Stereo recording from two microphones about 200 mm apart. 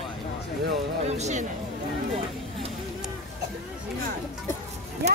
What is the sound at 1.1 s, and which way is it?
Music, 35° right (ahead or behind).